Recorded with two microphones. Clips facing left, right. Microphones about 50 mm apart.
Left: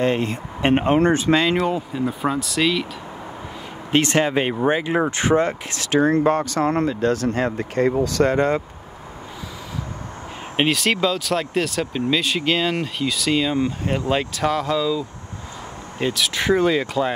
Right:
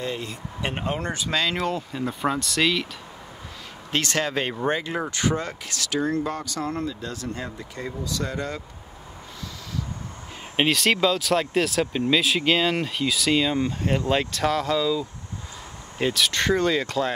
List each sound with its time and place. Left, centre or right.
0.0 s speech: left
1.6 s speech: centre
3.9 s speech: left
10.5 s speech: centre